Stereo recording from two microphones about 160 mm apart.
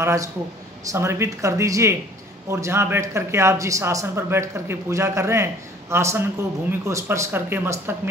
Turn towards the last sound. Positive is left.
turn(degrees=-15)  # may be behind; listen again after turning